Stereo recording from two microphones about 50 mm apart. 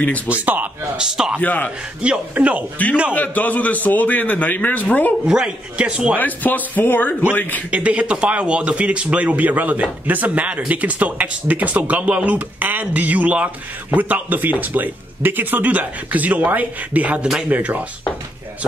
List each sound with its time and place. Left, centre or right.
0.3 s speech: right
0.9 s a man's voice: centre
1.4 s a man's voice: left
2.0 s speech: right
2.8 s a man's voice: left
5.2 s a man's voice: centre
6.1 s a man's voice: left
7.7 s speech: right